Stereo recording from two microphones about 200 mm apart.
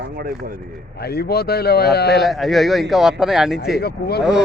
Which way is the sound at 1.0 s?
50° left (ahead or behind).